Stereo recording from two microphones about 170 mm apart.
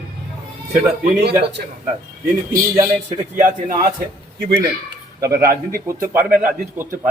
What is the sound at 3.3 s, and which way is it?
Speech, 50° right (ahead or behind).